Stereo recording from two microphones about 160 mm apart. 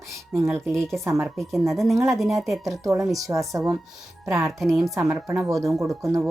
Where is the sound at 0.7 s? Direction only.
5° left (ahead or behind).